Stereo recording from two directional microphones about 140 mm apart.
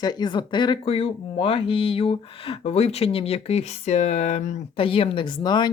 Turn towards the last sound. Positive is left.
turn(degrees=30)  # may be behind; listen again after turning